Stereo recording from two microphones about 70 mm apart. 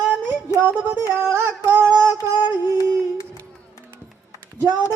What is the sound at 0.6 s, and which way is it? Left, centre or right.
Music, right.